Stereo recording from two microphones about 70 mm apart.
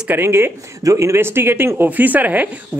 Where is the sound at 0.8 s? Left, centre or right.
Right.